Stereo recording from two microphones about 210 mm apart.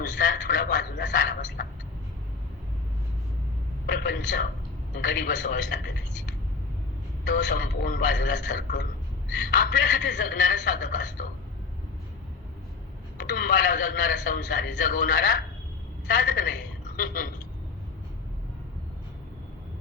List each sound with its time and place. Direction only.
0.0 s a man's voice: 45° left (ahead or behind)
3.8 s a man's voice: 45° left (ahead or behind)
7.3 s a man's voice: 55° left (ahead or behind)
9.5 s a man's voice: 45° left (ahead or behind)
13.1 s a man's voice: 50° left (ahead or behind)